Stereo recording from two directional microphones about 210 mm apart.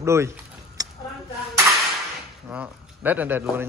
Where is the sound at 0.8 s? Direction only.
15° right (ahead or behind).